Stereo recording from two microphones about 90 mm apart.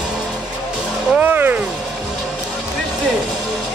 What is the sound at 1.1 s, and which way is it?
Vehicle, 20° right (ahead or behind).